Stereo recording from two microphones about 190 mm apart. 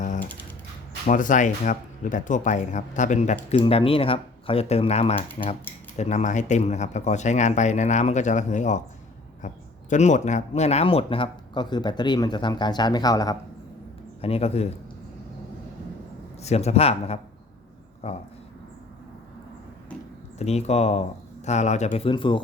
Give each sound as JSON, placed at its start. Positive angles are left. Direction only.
{"t": 0.0, "sound": "typewriter", "side_deg": 40}
{"t": 1.0, "sound": "speech", "side_deg": 45}
{"t": 3.5, "sound": "speech", "side_deg": 25}
{"t": 14.2, "sound": "speech", "side_deg": 30}
{"t": 16.4, "sound": "speech", "side_deg": 35}
{"t": 20.4, "sound": "speech", "side_deg": 35}